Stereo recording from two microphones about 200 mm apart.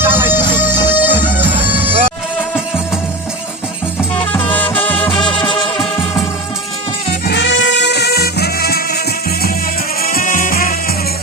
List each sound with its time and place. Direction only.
0.0 s music: 10° right (ahead or behind)
4.2 s music: 10° left (ahead or behind)
5.4 s music: 25° left (ahead or behind)
5.7 s music: centre (ahead or behind)
7.3 s music: 60° left (ahead or behind)
10.0 s music: 45° left (ahead or behind)